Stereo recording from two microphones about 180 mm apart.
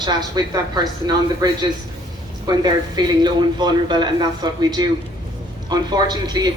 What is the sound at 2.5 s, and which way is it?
A woman's voice, 20° right (ahead or behind).